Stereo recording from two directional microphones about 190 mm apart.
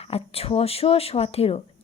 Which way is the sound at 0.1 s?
30° left (ahead or behind).